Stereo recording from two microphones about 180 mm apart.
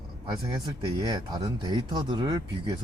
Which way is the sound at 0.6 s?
20° right (ahead or behind).